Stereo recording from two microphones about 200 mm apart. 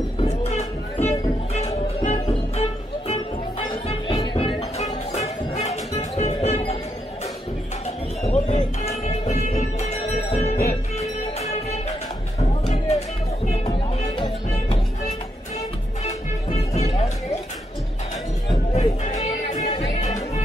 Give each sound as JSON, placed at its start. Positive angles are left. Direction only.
{"t": 0.2, "sound": "music", "side_deg": 30}
{"t": 8.2, "sound": "music", "side_deg": 35}
{"t": 13.7, "sound": "music", "side_deg": 20}
{"t": 16.0, "sound": "music", "side_deg": 35}
{"t": 18.5, "sound": "music", "side_deg": 30}